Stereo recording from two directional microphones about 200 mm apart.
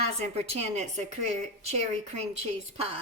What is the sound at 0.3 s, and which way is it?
Speech, 30° right (ahead or behind).